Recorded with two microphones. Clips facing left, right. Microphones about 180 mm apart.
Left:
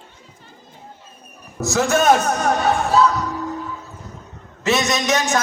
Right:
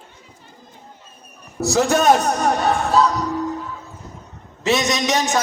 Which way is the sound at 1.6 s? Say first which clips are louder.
Right 1 dB; 35° right (ahead or behind).